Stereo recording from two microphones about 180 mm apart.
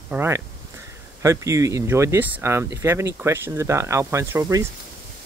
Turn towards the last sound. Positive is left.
turn(degrees=-20)  # may be behind; listen again after turning